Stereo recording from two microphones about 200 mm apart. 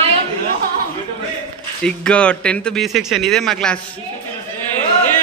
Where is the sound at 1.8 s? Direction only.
5° left (ahead or behind).